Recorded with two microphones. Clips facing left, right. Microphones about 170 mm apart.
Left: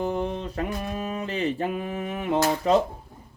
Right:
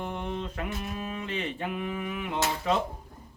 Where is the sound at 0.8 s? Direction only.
45° left (ahead or behind).